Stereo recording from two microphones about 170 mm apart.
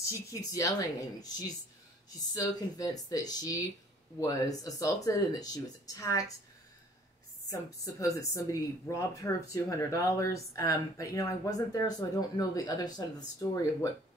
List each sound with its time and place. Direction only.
0.0 s speech: 20° left (ahead or behind)
7.4 s speech: 20° left (ahead or behind)